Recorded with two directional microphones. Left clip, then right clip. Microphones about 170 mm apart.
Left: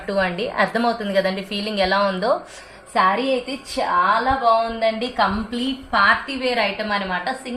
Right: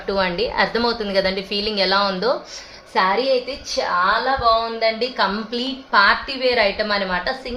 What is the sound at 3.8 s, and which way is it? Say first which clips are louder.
Speech: even; 40° right (ahead or behind).